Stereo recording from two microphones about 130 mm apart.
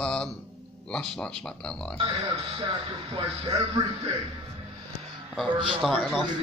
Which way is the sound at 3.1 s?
35° right (ahead or behind).